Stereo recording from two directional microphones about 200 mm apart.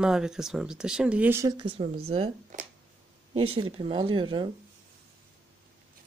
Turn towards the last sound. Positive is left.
turn(degrees=-25)  # may be behind; listen again after turning